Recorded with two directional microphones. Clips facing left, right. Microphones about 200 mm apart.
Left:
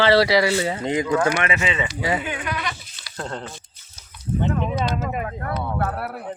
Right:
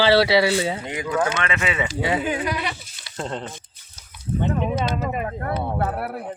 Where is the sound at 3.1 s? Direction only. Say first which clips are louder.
Right 2 dB; 25° right (ahead or behind).